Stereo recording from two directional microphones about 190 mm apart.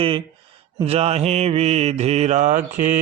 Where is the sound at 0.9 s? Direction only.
35° right (ahead or behind).